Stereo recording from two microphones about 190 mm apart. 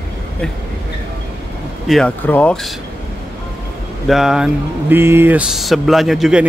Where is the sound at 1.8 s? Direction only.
5° left (ahead or behind).